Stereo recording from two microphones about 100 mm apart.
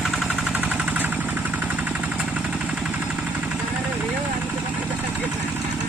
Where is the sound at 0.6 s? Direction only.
15° right (ahead or behind).